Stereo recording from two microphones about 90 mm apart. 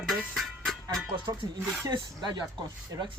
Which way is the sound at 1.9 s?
55° right (ahead or behind).